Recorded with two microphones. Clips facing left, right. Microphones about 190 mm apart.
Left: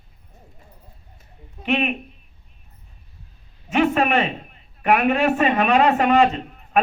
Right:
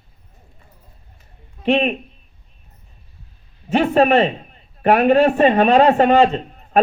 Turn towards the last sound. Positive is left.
turn(degrees=-35)  # may be behind; listen again after turning